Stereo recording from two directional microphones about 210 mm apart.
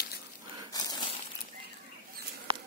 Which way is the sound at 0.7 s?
20° left (ahead or behind).